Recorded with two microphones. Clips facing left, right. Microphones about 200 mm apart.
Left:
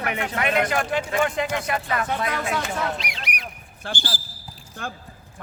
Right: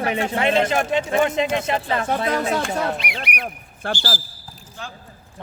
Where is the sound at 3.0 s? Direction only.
60° right (ahead or behind).